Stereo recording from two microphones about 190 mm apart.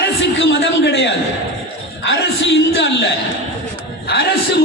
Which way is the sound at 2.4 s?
65° left (ahead or behind).